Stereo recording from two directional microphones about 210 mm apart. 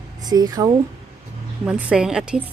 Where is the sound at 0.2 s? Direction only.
20° right (ahead or behind).